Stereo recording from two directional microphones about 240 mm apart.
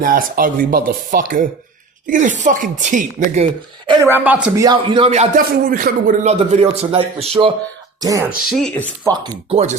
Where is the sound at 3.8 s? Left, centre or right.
Centre.